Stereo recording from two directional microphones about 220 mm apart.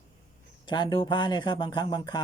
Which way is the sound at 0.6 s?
20° left (ahead or behind).